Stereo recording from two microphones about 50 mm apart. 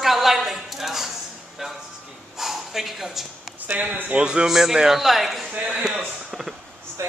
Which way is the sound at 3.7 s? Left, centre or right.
Right.